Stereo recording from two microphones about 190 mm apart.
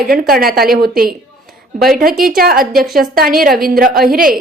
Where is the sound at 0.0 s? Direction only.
50° right (ahead or behind).